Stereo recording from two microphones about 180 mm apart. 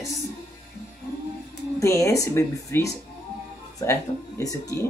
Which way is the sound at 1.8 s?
15° left (ahead or behind).